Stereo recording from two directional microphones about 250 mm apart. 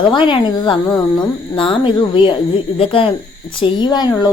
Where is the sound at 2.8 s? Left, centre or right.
Left.